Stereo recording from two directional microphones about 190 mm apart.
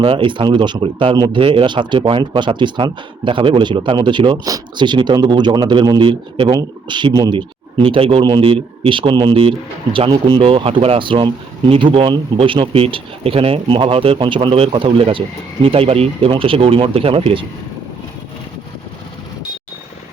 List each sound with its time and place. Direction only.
0.0 s speech: 25° right (ahead or behind)